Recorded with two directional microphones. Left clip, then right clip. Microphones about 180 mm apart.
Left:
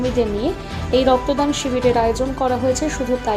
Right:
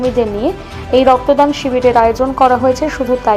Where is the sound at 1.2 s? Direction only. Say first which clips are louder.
Right 8 dB; 40° right (ahead or behind).